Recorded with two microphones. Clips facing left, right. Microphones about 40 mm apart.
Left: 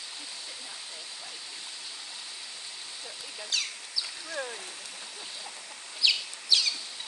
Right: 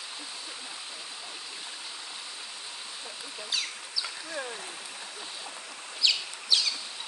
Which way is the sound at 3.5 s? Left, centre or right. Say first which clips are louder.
Even; centre.